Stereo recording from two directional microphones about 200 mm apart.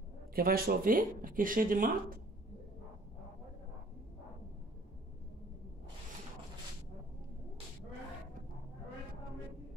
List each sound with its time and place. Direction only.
0.3 s speech: 50° right (ahead or behind)